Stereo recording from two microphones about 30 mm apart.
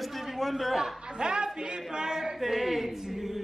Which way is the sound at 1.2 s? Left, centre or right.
Right.